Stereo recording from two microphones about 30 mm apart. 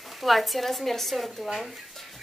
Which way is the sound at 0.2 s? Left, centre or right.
Centre.